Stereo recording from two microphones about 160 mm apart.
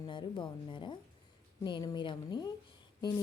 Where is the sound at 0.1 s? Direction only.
30° left (ahead or behind).